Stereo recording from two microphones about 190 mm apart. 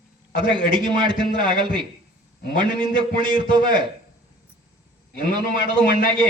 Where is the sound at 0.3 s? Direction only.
25° right (ahead or behind).